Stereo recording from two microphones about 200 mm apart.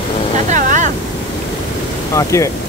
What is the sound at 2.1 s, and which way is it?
Speech, 15° left (ahead or behind).